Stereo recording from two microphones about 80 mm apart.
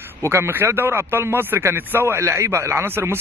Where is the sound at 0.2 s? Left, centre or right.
Right.